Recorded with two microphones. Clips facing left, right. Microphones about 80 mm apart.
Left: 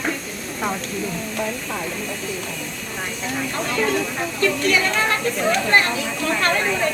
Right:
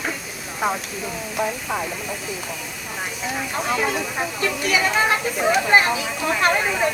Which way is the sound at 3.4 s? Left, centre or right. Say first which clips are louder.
Even; centre.